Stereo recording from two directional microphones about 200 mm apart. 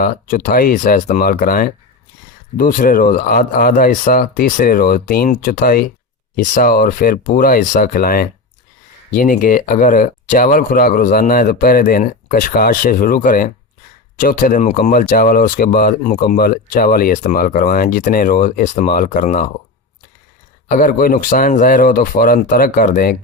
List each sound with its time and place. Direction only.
0.0 s speech: 45° left (ahead or behind)
20.7 s speech: 40° left (ahead or behind)